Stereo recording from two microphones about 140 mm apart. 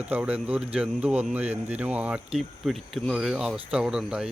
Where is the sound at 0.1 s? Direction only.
10° right (ahead or behind).